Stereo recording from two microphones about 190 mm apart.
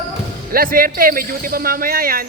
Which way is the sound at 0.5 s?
50° right (ahead or behind).